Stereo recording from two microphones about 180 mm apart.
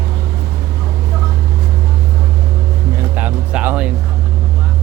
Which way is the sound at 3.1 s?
5° right (ahead or behind).